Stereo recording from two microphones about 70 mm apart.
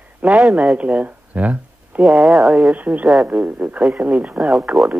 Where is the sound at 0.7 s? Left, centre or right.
Centre.